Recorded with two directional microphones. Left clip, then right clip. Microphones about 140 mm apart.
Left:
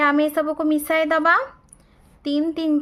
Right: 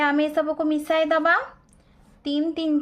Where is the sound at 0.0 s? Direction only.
35° left (ahead or behind).